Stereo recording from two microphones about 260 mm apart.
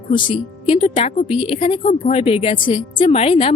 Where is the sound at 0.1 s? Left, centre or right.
Centre.